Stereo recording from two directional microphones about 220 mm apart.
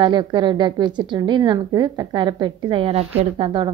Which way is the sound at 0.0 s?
20° right (ahead or behind).